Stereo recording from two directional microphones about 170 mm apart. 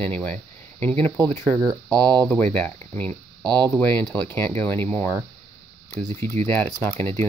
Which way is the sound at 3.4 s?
25° right (ahead or behind).